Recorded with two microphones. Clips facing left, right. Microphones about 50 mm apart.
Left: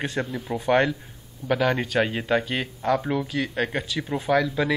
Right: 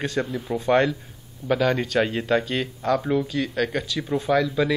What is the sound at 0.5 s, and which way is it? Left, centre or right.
A man's voice, centre.